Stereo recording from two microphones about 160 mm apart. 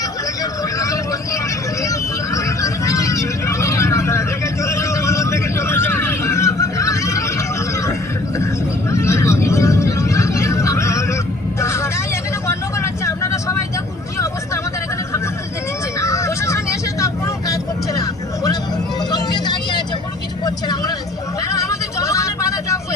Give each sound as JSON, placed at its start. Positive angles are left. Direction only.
{"t": 0.6, "sound": "vehicle", "side_deg": 20}
{"t": 16.0, "sound": "vehicle", "side_deg": 20}